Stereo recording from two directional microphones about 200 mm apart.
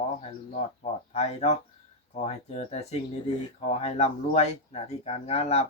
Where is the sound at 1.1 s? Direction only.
35° left (ahead or behind).